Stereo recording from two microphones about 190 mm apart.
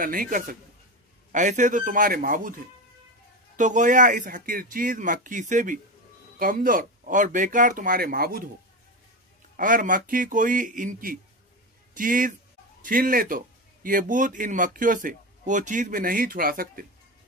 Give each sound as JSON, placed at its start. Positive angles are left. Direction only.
{"t": 0.0, "sound": "speech", "side_deg": -45}
{"t": 3.5, "sound": "speech", "side_deg": -40}
{"t": 9.6, "sound": "speech", "side_deg": -45}